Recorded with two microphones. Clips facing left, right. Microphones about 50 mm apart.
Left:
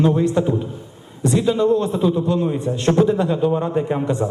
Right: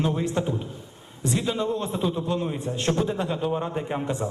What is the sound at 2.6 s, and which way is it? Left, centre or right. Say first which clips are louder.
Speech: left 8 dB; left.